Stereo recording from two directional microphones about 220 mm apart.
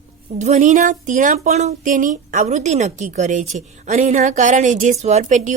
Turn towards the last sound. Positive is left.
turn(degrees=-35)  # may be behind; listen again after turning